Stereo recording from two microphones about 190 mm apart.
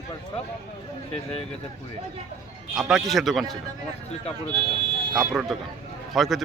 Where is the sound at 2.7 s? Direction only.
Centre (ahead or behind).